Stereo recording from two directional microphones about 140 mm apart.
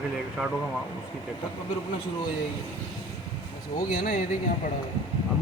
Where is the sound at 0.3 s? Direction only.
Centre (ahead or behind).